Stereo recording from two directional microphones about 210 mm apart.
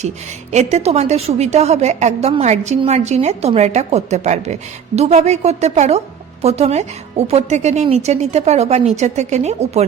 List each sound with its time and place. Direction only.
0.5 s a woman's voice: 30° right (ahead or behind)